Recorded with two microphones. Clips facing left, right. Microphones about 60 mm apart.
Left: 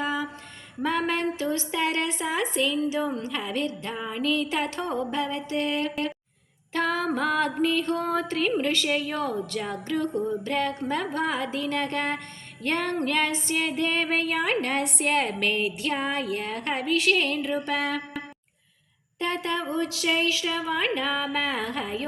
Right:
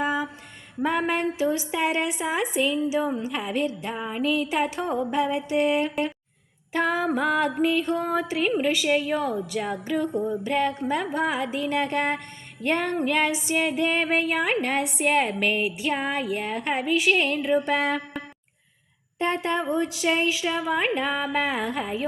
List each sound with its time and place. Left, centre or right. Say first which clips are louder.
0.0 s a sound: right 3 dB; centre
0.8 s a woman's voice: right 2 dB; centre
19.2 s a woman's voice: right 3 dB; right